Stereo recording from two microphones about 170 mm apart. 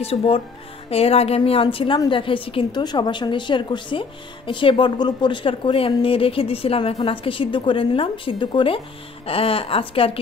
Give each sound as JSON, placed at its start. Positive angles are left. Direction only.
{"t": 0.0, "sound": "a woman's voice", "side_deg": 35}